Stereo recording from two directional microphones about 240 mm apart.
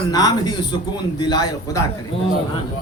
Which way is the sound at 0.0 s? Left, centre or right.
Centre.